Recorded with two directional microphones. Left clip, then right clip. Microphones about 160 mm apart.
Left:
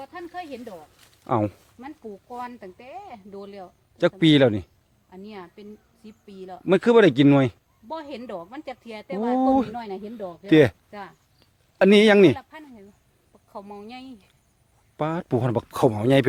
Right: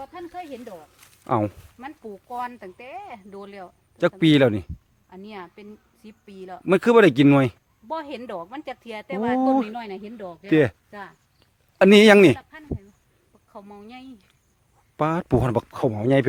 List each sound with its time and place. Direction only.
0.0 s speech: 10° left (ahead or behind)
1.8 s speech: 50° right (ahead or behind)
4.2 s speech: 10° right (ahead or behind)
5.1 s a woman's voice: 45° right (ahead or behind)
6.7 s speech: 10° right (ahead or behind)
7.9 s a woman's voice: 40° right (ahead or behind)
9.4 s speech: 10° right (ahead or behind)
9.7 s a woman's voice: 30° right (ahead or behind)
10.2 s speech: 15° right (ahead or behind)
10.5 s speech: 5° left (ahead or behind)
11.8 s a woman's voice: 25° right (ahead or behind)
12.4 s speech: 35° left (ahead or behind)
14.9 s speech: 25° right (ahead or behind)
15.9 s speech: 30° left (ahead or behind)